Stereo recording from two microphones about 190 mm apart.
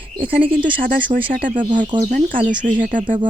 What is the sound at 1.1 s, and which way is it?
Speech, 30° right (ahead or behind).